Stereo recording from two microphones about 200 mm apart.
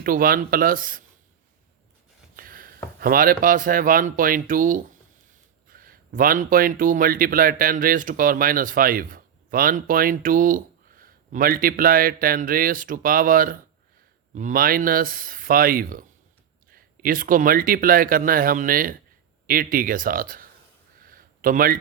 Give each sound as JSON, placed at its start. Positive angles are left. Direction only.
{"t": 0.0, "sound": "speech", "side_deg": -45}
{"t": 2.3, "sound": "speech", "side_deg": -45}
{"t": 21.0, "sound": "a sound", "side_deg": -45}